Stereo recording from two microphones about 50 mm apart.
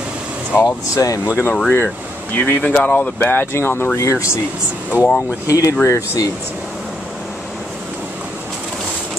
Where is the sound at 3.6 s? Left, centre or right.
Left.